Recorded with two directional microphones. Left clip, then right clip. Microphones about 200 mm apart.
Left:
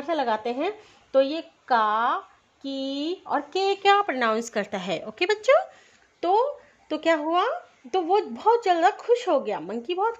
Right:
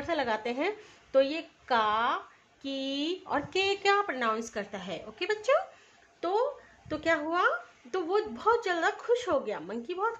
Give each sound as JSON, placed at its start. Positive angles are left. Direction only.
{"t": 0.0, "sound": "a woman's voice", "side_deg": 25}
{"t": 6.2, "sound": "speech", "side_deg": 35}